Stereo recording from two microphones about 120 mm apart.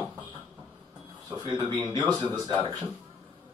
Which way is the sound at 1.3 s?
30° right (ahead or behind).